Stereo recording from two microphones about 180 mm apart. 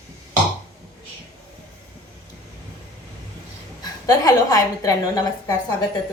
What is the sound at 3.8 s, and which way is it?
A woman's voice, 20° left (ahead or behind).